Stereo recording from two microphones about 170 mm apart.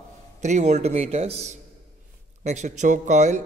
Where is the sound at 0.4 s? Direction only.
45° right (ahead or behind).